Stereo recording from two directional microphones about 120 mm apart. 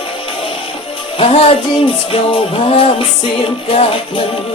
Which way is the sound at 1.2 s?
55° left (ahead or behind).